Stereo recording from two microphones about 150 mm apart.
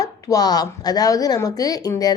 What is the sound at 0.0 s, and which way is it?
A woman's voice, 25° left (ahead or behind).